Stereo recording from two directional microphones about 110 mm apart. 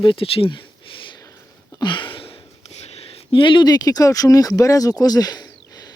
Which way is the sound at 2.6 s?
75° left (ahead or behind).